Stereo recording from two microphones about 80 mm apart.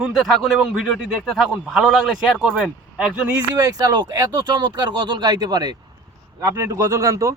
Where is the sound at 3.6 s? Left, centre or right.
Right.